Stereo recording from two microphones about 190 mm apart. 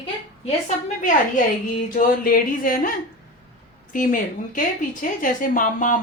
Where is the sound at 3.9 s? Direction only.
45° left (ahead or behind).